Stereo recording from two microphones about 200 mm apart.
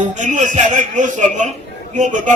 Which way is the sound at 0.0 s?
40° right (ahead or behind).